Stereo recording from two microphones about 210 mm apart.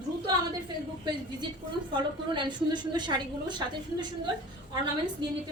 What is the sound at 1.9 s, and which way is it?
Speech, 20° right (ahead or behind).